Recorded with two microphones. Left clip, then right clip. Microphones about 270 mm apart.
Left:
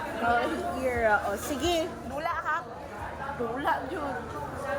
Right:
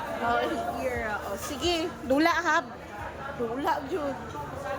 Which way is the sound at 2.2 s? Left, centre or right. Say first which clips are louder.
Right 5 dB; right.